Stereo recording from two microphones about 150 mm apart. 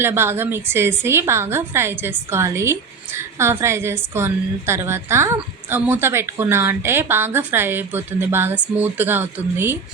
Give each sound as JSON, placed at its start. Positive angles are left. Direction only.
{"t": 0.0, "sound": "a woman's voice", "side_deg": -15}